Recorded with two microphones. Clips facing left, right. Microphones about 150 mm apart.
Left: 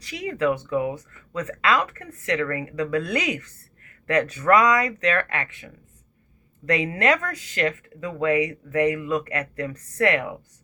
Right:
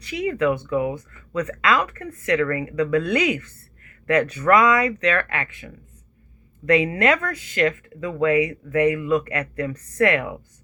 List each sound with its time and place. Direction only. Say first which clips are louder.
0.0 s speech: right 3 dB; 35° left (ahead or behind)
6.7 s speech: right 3 dB; 35° left (ahead or behind)